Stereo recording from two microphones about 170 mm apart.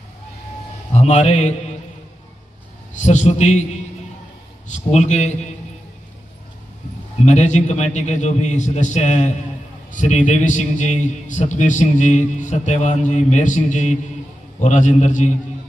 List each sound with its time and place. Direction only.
0.9 s speech: 40° left (ahead or behind)
3.0 s a man's voice: 45° left (ahead or behind)
4.6 s a man's voice: 45° left (ahead or behind)
7.2 s a man's voice: 45° left (ahead or behind)